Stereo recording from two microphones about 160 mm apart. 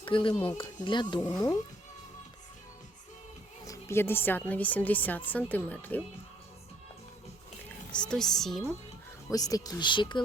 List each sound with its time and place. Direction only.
0.0 s speech: 30° left (ahead or behind)
3.7 s a woman's voice: 15° left (ahead or behind)
7.9 s speech: 5° left (ahead or behind)
9.3 s speech: 25° left (ahead or behind)